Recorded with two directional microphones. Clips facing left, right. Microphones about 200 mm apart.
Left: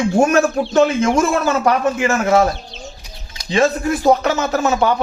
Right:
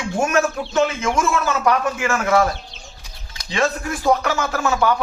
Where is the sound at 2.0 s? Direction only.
20° left (ahead or behind).